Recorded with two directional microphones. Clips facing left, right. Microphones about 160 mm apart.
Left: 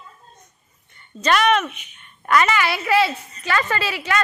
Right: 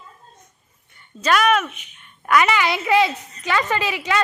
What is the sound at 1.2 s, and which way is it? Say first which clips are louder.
A woman's voice: even; 5° right (ahead or behind).